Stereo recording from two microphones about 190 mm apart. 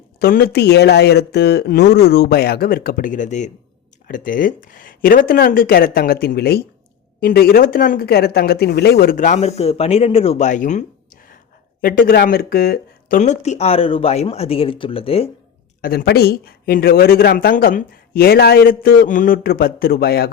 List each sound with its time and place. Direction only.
0.2 s speech: 55° left (ahead or behind); by 15.3 s 30° left (ahead or behind)
15.8 s speech: 50° left (ahead or behind)